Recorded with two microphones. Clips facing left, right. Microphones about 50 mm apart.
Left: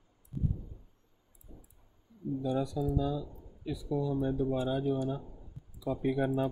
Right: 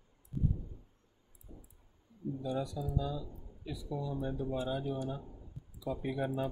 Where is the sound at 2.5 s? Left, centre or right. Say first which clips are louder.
Left 5 dB; left.